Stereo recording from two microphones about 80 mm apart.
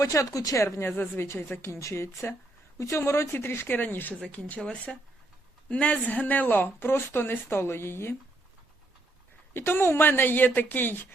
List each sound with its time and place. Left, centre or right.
0.0 s a woman's voice: left
9.6 s speech: left